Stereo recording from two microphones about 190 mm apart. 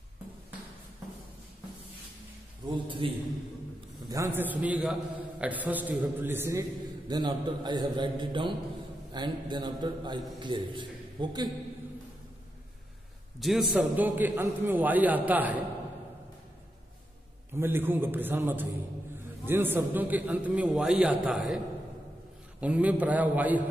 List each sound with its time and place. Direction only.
2.7 s a man's voice: 25° right (ahead or behind)
4.1 s a man's voice: 15° right (ahead or behind)
7.1 s a man's voice: 25° right (ahead or behind)
13.4 s a man's voice: centre (ahead or behind)
17.5 s a man's voice: 10° right (ahead or behind)
22.6 s a man's voice: 10° right (ahead or behind)